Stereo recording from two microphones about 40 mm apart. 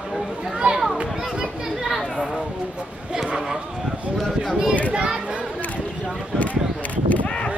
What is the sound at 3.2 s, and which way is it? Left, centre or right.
Speech, centre.